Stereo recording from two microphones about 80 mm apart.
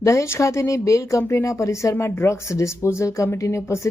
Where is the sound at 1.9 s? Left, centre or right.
Left.